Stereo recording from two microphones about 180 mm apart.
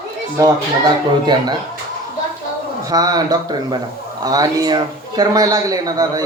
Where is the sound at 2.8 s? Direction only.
20° right (ahead or behind).